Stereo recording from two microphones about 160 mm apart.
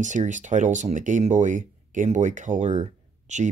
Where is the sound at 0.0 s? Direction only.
50° right (ahead or behind).